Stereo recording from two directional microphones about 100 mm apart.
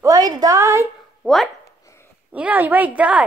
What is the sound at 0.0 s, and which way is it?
Speech, 35° right (ahead or behind).